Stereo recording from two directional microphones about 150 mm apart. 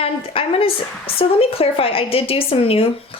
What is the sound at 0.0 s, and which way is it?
A woman's voice, 40° left (ahead or behind).